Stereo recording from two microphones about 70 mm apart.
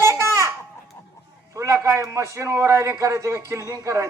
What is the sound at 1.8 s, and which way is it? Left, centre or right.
A man's voice, right.